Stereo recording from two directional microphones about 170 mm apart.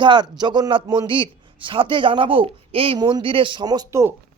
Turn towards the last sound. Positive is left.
turn(degrees=-20)  # may be behind; listen again after turning